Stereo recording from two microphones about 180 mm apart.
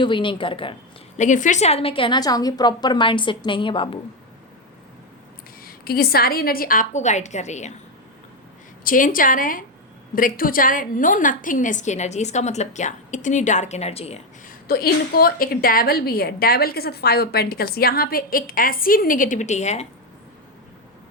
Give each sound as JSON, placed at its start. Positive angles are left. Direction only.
{"t": 0.0, "sound": "a woman's voice", "side_deg": 25}
{"t": 1.1, "sound": "a woman's voice", "side_deg": 45}
{"t": 5.6, "sound": "a woman's voice", "side_deg": 60}
{"t": 8.8, "sound": "a woman's voice", "side_deg": 50}
{"t": 14.7, "sound": "a woman's voice", "side_deg": 55}